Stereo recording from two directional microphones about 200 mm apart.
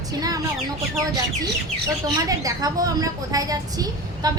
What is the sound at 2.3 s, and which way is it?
A woman's voice, 15° right (ahead or behind).